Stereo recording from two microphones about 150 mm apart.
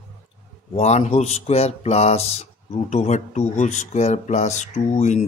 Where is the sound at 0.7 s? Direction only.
45° left (ahead or behind).